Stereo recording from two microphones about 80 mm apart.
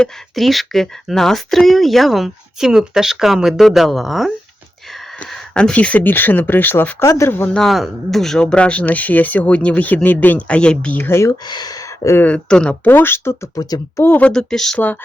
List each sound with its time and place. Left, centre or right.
0.0 s speech: centre
5.2 s speech: centre; by 6.9 s left
7.0 s speech: left
7.5 s speech: centre
11.0 s speech: left
11.4 s speech: left
12.2 s speech: centre
12.8 s speech: left
13.6 s speech: left
14.0 s speech: left
14.3 s speech: centre